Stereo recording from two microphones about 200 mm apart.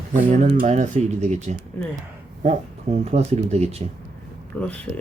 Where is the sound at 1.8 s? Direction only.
10° left (ahead or behind).